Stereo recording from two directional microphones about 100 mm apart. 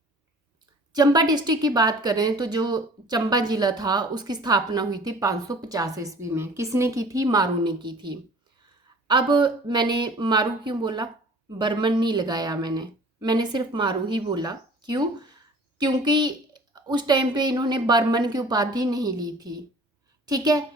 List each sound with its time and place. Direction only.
0.9 s a woman's voice: 40° right (ahead or behind)